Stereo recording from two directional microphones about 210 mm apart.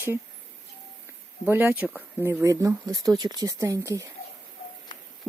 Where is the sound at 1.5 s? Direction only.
10° right (ahead or behind).